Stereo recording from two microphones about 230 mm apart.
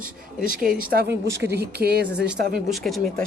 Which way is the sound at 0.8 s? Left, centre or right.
Right.